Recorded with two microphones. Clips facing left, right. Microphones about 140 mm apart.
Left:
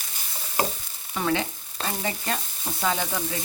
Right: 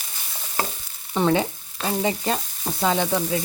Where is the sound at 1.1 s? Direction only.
30° right (ahead or behind).